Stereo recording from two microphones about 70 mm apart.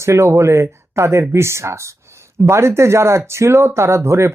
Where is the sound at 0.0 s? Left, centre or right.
Right.